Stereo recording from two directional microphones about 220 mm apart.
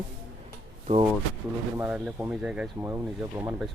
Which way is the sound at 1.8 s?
5° right (ahead or behind).